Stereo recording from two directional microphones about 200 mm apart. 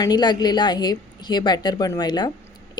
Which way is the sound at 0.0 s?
20° left (ahead or behind).